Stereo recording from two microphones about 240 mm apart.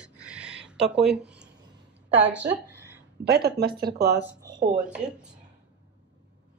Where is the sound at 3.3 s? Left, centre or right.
Right.